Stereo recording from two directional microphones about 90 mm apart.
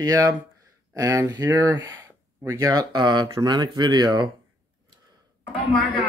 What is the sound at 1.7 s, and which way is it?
Speech, 30° right (ahead or behind).